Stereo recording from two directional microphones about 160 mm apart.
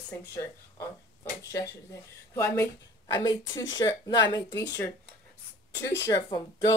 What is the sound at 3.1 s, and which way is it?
Speech, 25° left (ahead or behind).